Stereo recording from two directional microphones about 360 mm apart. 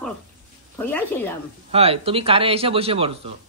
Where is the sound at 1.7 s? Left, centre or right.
Centre.